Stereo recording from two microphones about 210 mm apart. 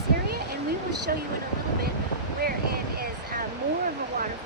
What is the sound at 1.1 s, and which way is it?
Speech, 45° right (ahead or behind).